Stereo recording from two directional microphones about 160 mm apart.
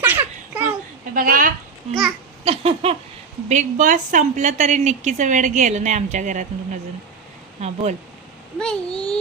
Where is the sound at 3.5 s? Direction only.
50° right (ahead or behind).